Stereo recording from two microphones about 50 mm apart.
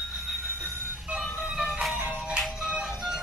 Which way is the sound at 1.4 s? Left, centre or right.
Centre.